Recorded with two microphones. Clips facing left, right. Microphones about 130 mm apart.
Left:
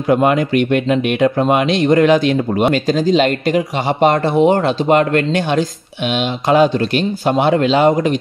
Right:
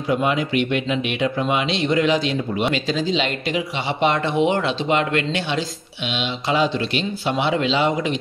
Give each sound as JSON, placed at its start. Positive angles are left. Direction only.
{"t": 0.1, "sound": "speech", "side_deg": 50}